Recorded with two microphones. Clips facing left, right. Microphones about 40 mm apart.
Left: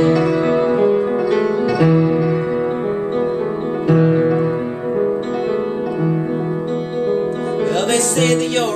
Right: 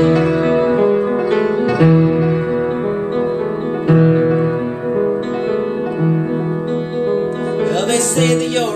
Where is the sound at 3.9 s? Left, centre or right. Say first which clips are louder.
Right 2 dB; right.